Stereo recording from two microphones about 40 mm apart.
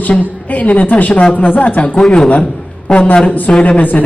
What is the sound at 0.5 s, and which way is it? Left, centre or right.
Speech, left.